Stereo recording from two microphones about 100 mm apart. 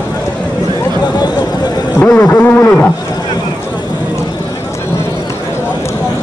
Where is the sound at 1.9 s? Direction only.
10° left (ahead or behind).